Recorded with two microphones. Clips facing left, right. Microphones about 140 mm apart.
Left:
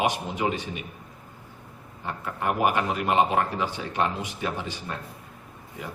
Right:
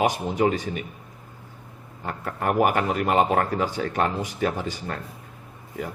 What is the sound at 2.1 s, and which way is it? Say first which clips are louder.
Speech: right 2 dB; 50° right (ahead or behind).